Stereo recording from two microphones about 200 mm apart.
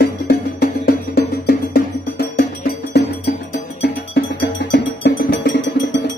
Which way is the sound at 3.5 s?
55° left (ahead or behind).